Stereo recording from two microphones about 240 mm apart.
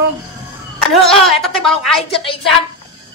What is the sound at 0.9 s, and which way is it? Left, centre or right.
Speech, centre.